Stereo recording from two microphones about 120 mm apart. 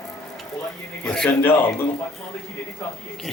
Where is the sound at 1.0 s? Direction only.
5° left (ahead or behind).